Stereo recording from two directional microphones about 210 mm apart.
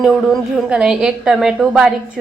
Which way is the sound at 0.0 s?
Centre (ahead or behind).